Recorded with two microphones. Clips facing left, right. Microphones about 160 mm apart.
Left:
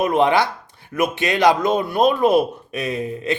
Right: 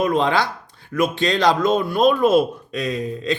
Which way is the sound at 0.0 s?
20° left (ahead or behind).